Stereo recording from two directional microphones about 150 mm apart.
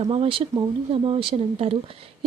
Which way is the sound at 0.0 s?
40° right (ahead or behind).